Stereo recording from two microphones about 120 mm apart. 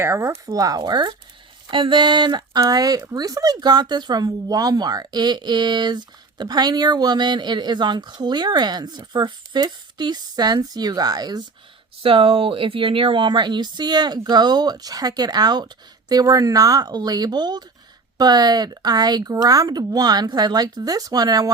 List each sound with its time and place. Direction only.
0.0 s speech: 20° right (ahead or behind)
12.0 s speech: 50° right (ahead or behind); by 21.5 s 30° right (ahead or behind)